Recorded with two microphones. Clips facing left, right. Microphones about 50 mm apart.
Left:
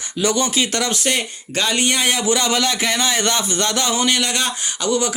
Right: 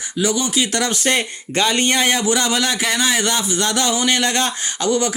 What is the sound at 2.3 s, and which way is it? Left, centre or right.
Speech, right.